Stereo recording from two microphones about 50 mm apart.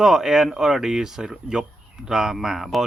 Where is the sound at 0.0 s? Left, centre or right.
Centre.